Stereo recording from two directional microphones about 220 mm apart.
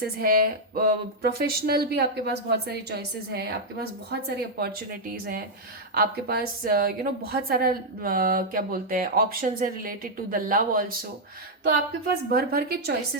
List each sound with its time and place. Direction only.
0.0 s a woman's voice: 40° right (ahead or behind)